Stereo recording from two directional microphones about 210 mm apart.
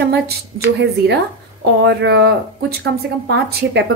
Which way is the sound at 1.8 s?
55° right (ahead or behind).